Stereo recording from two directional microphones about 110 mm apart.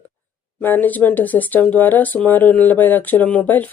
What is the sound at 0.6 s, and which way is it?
Speech, 15° left (ahead or behind).